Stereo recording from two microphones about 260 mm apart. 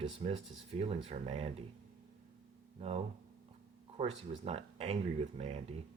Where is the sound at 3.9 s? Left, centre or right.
Right.